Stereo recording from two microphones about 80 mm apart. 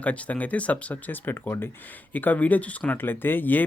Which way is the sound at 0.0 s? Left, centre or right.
Centre.